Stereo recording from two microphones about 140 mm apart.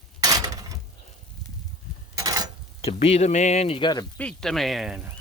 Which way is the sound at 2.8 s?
45° left (ahead or behind).